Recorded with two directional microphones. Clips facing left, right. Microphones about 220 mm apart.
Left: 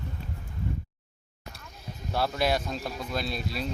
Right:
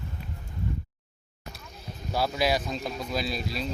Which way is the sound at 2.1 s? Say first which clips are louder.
Right 1 dB; 5° right (ahead or behind).